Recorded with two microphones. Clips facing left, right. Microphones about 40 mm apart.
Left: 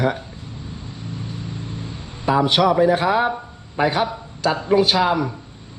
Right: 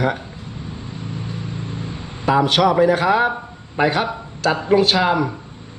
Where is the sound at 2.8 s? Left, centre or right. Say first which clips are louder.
Right 1 dB; centre.